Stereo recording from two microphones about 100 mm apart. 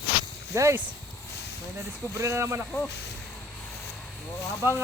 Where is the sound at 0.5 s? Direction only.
30° right (ahead or behind).